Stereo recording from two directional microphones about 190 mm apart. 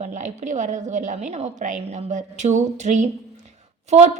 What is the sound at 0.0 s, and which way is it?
A woman's voice, 40° right (ahead or behind).